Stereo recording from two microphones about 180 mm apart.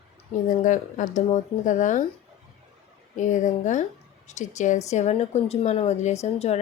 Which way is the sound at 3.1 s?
45° left (ahead or behind).